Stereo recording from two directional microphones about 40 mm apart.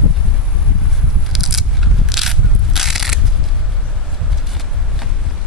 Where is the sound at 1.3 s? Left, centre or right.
Centre.